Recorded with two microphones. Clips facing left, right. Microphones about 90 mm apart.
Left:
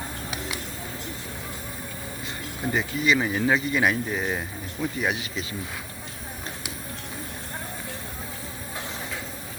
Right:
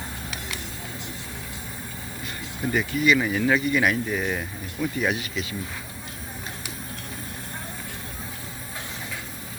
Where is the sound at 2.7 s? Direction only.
25° left (ahead or behind).